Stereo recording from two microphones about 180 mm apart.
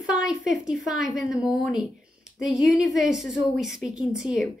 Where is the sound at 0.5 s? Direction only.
Centre (ahead or behind).